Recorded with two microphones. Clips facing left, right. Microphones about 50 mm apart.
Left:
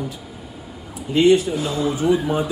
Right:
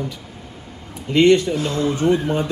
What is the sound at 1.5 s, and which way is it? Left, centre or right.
Speech, centre.